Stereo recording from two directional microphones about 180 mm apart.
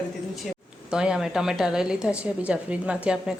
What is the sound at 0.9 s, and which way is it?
A woman's voice, 5° right (ahead or behind).